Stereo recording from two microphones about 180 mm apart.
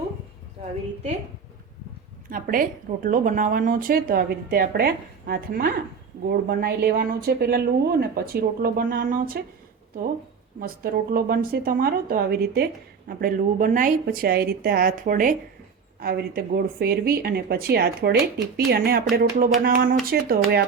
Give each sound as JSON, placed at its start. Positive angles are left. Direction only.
{"t": 2.3, "sound": "speech", "side_deg": -50}
{"t": 10.6, "sound": "a woman's voice", "side_deg": -55}